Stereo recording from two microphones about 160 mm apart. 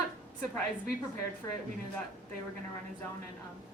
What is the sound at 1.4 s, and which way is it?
Speech, 20° left (ahead or behind).